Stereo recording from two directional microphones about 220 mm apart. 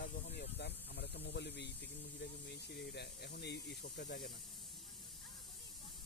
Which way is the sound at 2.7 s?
50° left (ahead or behind).